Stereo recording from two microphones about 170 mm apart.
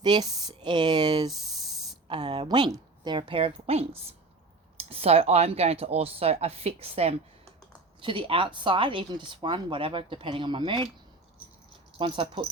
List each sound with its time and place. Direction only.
0.0 s speech: 25° right (ahead or behind)
11.9 s speech: 30° right (ahead or behind)